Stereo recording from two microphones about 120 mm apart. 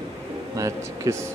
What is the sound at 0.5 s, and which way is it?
Music, 25° right (ahead or behind).